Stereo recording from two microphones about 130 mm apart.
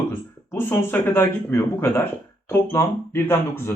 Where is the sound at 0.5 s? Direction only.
15° left (ahead or behind).